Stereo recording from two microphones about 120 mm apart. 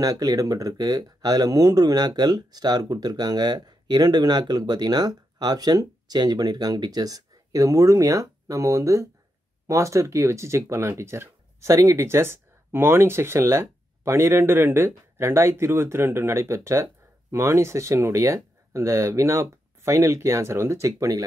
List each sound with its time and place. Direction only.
0.0 s speech: 30° right (ahead or behind)